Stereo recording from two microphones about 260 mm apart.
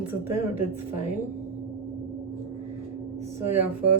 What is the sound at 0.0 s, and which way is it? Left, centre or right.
Speech, centre.